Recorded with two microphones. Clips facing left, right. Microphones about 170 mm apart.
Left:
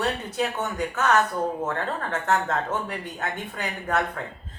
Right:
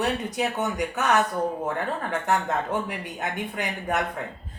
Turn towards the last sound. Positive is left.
turn(degrees=-15)  # may be behind; listen again after turning